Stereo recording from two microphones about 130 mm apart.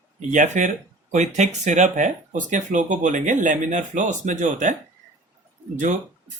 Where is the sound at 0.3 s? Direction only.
70° right (ahead or behind).